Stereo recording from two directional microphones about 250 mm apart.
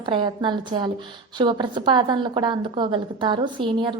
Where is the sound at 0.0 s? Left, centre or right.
Centre.